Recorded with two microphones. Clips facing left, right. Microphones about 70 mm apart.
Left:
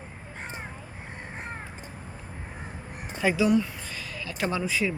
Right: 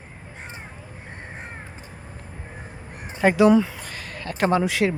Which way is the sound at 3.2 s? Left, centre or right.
Right.